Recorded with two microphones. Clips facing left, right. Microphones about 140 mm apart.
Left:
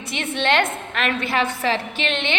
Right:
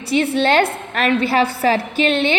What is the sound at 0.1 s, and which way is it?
A woman's voice, 35° right (ahead or behind).